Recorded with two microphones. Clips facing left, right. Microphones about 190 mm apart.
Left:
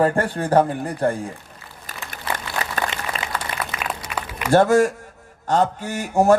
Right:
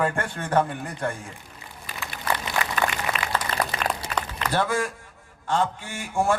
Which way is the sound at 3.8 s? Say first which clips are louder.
Right 1 dB; 5° left (ahead or behind).